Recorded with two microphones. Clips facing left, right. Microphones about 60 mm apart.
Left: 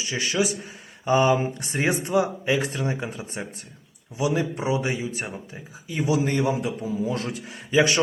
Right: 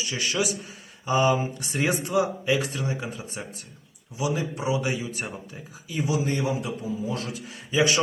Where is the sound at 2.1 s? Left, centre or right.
Left.